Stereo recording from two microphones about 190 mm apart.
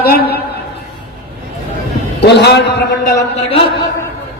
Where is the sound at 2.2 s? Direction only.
65° left (ahead or behind).